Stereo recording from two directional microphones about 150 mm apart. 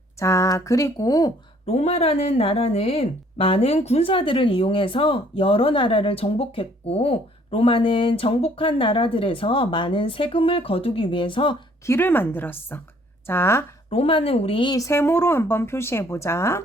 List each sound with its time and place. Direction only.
0.2 s speech: 20° left (ahead or behind)
1.6 s speech: 45° left (ahead or behind)
11.9 s speech: 15° left (ahead or behind)
13.9 s speech: 40° left (ahead or behind); by 16.6 s 20° left (ahead or behind)